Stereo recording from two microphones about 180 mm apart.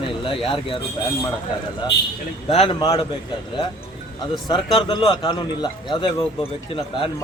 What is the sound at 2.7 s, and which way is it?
Speech, 25° left (ahead or behind).